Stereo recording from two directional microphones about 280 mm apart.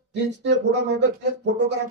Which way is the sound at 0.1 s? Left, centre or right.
Right.